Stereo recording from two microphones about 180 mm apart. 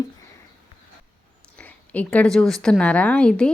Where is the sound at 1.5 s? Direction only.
10° left (ahead or behind).